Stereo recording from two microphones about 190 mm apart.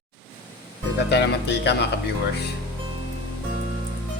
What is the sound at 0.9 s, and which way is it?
Speech, 65° left (ahead or behind).